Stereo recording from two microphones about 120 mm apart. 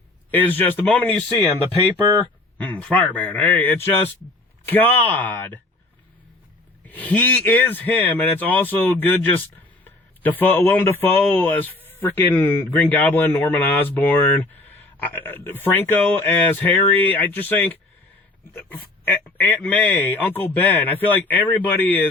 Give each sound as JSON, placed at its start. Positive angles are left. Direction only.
{"t": 0.3, "sound": "a man's voice", "side_deg": 15}
{"t": 2.6, "sound": "a man's voice", "side_deg": 15}
{"t": 6.8, "sound": "a man's voice", "side_deg": 10}
{"t": 19.0, "sound": "a man's voice", "side_deg": 15}